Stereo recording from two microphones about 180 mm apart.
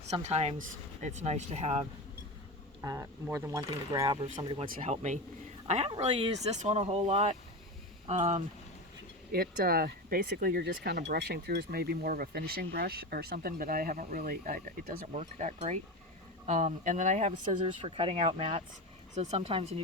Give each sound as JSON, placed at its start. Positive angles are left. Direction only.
{"t": 0.1, "sound": "speech", "side_deg": -35}
{"t": 2.8, "sound": "speech", "side_deg": -15}
{"t": 4.0, "sound": "speech", "side_deg": -30}
{"t": 4.8, "sound": "speech", "side_deg": -40}
{"t": 9.3, "sound": "speech", "side_deg": -55}
{"t": 15.1, "sound": "speech", "side_deg": -40}
{"t": 17.4, "sound": "speech", "side_deg": -30}